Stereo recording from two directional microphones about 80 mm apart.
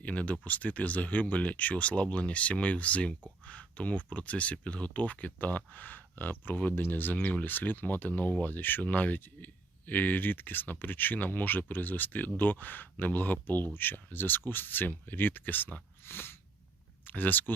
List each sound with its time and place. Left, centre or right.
0.0 s speech: centre